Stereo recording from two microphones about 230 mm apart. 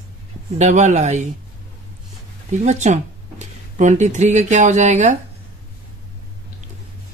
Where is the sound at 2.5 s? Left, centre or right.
Right.